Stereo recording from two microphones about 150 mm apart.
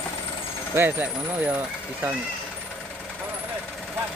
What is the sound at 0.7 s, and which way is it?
Speech, 15° right (ahead or behind).